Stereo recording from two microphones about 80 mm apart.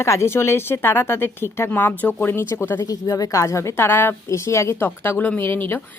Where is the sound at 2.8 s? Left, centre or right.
Left.